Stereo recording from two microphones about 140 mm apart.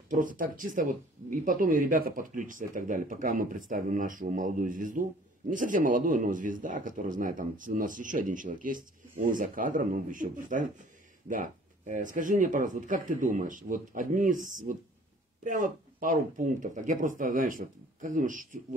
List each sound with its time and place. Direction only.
0.1 s speech: 70° right (ahead or behind)